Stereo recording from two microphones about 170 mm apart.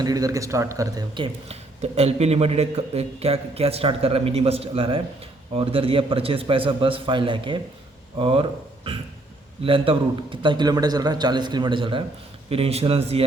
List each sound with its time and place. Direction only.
0.0 s a man's voice: 20° right (ahead or behind)
1.8 s a man's voice: 40° right (ahead or behind)